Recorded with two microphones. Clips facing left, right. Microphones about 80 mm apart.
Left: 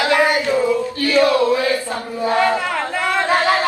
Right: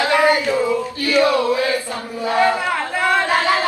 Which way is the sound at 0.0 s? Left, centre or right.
Left.